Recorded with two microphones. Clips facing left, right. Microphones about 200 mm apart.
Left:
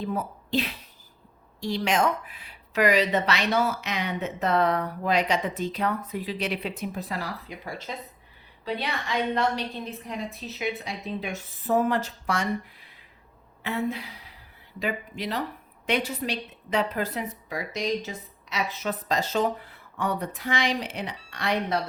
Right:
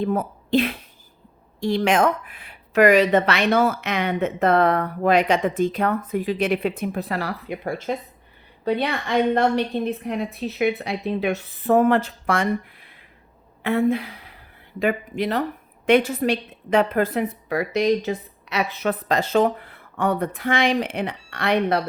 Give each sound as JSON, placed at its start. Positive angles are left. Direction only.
{"t": 0.0, "sound": "a woman's voice", "side_deg": -55}